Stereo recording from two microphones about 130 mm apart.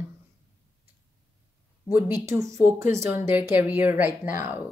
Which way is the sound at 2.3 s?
20° right (ahead or behind).